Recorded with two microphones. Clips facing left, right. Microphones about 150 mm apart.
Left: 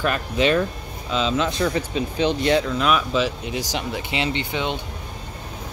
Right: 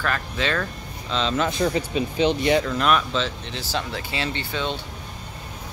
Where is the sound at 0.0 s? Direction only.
20° left (ahead or behind).